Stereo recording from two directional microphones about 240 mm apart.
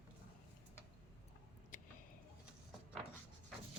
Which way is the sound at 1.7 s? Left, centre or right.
Left.